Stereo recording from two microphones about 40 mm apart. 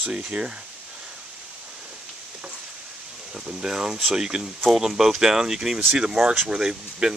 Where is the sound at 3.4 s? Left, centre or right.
Centre.